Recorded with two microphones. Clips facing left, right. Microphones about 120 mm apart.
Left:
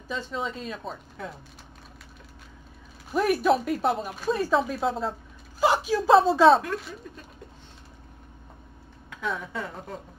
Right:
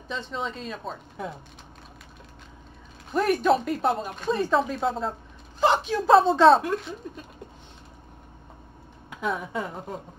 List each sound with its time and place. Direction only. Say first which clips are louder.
0.1 s speech: even; centre (ahead or behind)
3.1 s speech: right 1 dB; 5° left (ahead or behind)
9.1 s speech: right 3 dB; 20° right (ahead or behind)